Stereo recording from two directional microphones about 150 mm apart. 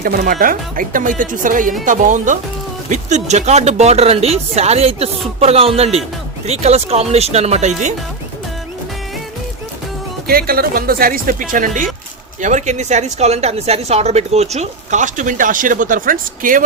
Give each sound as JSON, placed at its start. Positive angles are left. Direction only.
{"t": 0.0, "sound": "a woman's voice", "side_deg": -65}
{"t": 10.2, "sound": "a woman's voice", "side_deg": -80}